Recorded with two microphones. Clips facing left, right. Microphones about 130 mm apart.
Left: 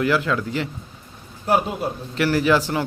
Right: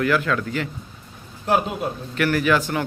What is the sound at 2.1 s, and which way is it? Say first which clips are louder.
Speech: left 1 dB; 30° left (ahead or behind).